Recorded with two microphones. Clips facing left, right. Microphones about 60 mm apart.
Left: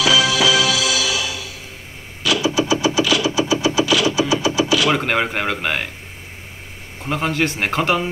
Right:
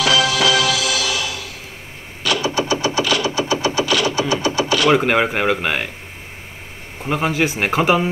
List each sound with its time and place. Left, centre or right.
0.0 s music: right
2.2 s synthesizer: right
2.7 s engine: right
3.6 s a sound: right
4.8 s speech: centre
7.0 s speech: centre